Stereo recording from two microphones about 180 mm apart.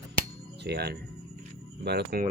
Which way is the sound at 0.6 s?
65° right (ahead or behind).